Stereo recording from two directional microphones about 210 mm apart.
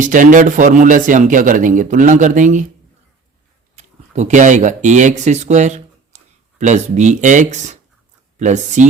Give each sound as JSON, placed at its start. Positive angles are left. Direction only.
{"t": 0.0, "sound": "a man's voice", "side_deg": -40}
{"t": 3.8, "sound": "a man's voice", "side_deg": -30}